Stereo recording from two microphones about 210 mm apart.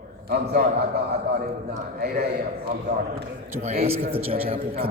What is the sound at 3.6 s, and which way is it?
A man's voice, 30° right (ahead or behind).